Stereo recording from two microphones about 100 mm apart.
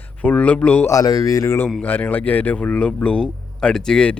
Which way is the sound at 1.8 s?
15° left (ahead or behind).